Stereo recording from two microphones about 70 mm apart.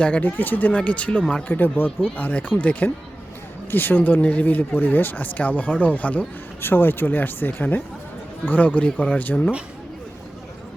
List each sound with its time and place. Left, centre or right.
0.0 s speech: left